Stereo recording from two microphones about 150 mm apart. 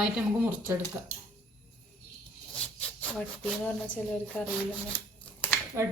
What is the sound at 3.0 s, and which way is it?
Speech, 10° left (ahead or behind).